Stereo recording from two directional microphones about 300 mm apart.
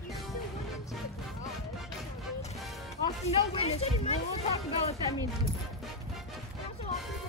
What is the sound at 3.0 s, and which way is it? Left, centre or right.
Speech, centre.